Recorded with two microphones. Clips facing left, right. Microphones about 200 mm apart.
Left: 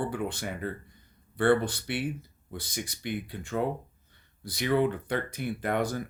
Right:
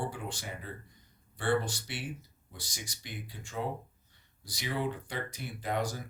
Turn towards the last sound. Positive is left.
turn(degrees=55)  # may be behind; listen again after turning